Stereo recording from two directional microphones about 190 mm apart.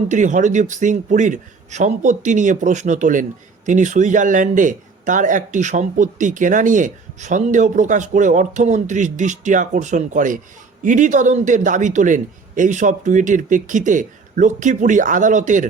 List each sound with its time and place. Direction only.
0.1 s a man's voice: 40° right (ahead or behind)